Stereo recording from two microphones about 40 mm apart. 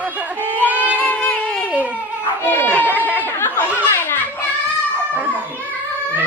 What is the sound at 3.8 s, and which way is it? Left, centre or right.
Children playing, left.